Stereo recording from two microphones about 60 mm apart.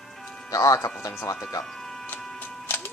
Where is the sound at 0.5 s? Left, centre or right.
Left.